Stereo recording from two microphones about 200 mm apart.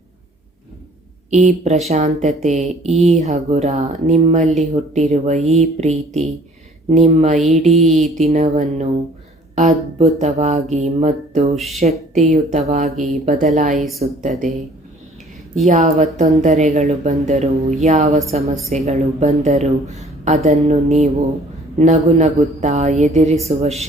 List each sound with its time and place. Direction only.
1.3 s speech: 35° right (ahead or behind)
4.4 s mantra: centre (ahead or behind)
4.7 s speech: 35° right (ahead or behind)
7.3 s mantra: centre (ahead or behind)
8.2 s speech: 35° right (ahead or behind)
11.5 s mantra: centre (ahead or behind)
11.8 s a woman's voice: 35° right (ahead or behind)
15.6 s speech: 35° right (ahead or behind)